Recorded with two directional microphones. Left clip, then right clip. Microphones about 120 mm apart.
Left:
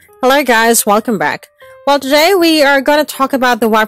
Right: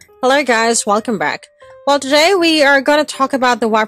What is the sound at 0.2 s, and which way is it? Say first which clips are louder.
Speech: left 3 dB; 45° left (ahead or behind).